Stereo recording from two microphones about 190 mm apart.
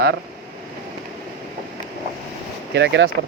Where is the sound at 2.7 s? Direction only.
65° right (ahead or behind).